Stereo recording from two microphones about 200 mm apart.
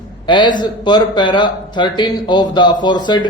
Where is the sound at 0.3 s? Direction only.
25° left (ahead or behind).